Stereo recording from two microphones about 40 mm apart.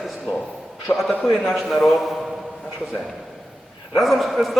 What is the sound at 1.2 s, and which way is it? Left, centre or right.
Speech, centre.